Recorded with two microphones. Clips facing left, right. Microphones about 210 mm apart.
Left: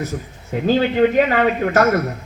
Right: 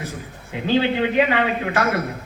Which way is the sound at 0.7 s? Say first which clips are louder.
Left 4 dB; 45° left (ahead or behind).